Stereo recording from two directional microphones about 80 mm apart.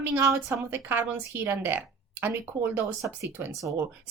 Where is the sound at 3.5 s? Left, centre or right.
Right.